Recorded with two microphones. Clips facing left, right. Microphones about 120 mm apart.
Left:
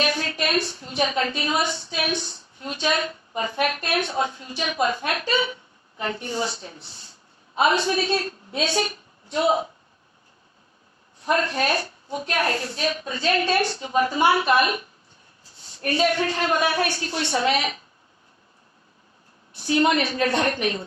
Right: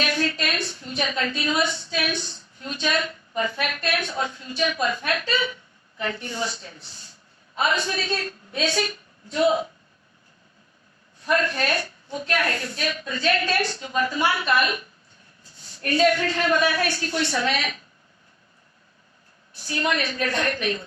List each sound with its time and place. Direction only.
0.0 s a sound: 25° left (ahead or behind)
1.5 s a woman's voice: 25° left (ahead or behind)
3.3 s a woman's voice: 30° left (ahead or behind)
11.2 s a woman's voice: 30° left (ahead or behind)
19.6 s a woman's voice: 25° left (ahead or behind)